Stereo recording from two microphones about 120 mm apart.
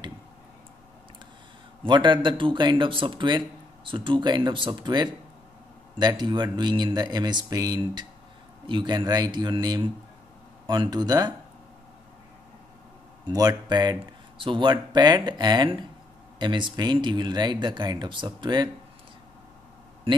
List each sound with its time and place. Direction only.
1.9 s speech: 40° right (ahead or behind)
13.3 s speech: 30° right (ahead or behind)